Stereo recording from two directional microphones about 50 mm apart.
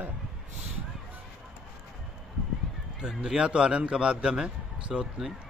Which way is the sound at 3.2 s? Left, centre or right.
Centre.